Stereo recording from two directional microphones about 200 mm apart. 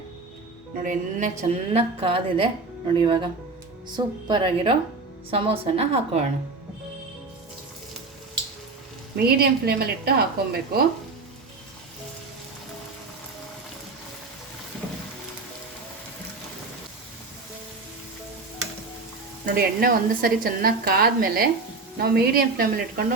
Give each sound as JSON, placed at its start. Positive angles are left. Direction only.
{"t": 0.8, "sound": "a woman's voice", "side_deg": -40}
{"t": 9.1, "sound": "a woman's voice", "side_deg": -50}
{"t": 19.5, "sound": "a woman's voice", "side_deg": -45}